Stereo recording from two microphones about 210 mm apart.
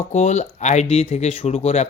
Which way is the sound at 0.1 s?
35° left (ahead or behind).